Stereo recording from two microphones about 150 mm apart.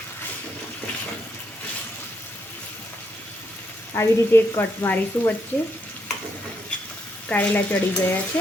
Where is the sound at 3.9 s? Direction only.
15° left (ahead or behind).